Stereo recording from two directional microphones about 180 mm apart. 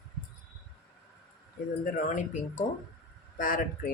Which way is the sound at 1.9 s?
45° left (ahead or behind).